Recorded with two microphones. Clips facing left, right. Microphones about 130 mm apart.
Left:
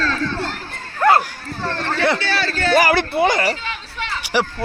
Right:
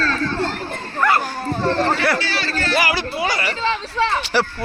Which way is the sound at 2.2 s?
50° left (ahead or behind).